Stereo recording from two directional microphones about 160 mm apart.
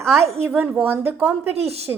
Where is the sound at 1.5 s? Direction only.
40° right (ahead or behind).